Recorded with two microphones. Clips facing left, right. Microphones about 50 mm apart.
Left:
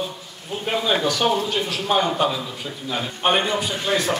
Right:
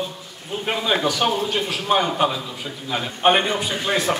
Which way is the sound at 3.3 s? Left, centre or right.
Right.